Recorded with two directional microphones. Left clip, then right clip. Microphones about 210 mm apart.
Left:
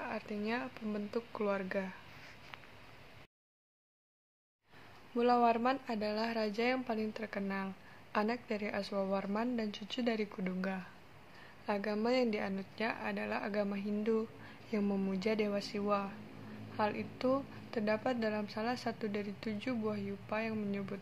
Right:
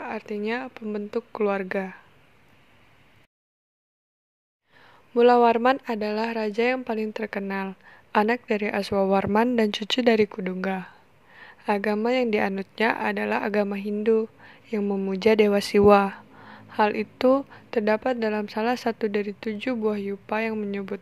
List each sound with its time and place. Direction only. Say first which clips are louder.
0.0 s speech: right 10 dB; 40° right (ahead or behind)
5.1 s speech: right 13 dB; 40° right (ahead or behind)
15.1 s speech: right 18 dB; 45° right (ahead or behind)